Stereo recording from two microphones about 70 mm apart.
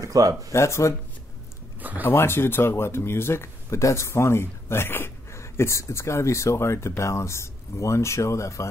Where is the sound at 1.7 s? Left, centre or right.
Right.